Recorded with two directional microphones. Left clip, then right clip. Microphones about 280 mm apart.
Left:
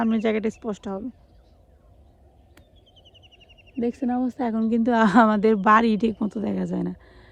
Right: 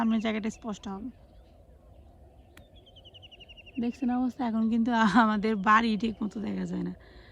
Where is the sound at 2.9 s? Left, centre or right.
Right.